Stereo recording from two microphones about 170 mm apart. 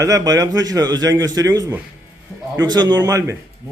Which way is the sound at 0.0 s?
20° right (ahead or behind).